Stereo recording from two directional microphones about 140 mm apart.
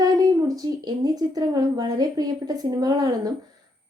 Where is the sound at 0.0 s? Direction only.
25° right (ahead or behind).